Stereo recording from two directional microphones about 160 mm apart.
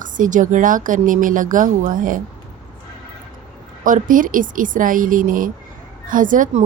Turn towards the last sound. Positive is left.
turn(degrees=-55)  # may be behind; listen again after turning